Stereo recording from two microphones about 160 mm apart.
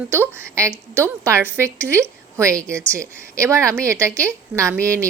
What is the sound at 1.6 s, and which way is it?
Speech, 10° left (ahead or behind).